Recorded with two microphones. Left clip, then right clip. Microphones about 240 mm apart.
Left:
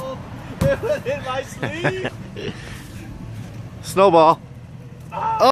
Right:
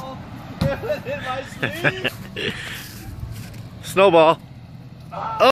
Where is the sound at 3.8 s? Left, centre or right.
Centre.